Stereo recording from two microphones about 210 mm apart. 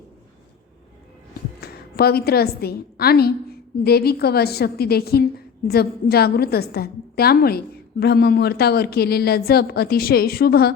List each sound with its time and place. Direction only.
1.6 s a woman's voice: 50° left (ahead or behind)